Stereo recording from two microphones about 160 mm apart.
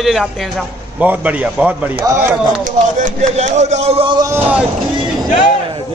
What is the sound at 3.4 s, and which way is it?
Speech, 45° right (ahead or behind).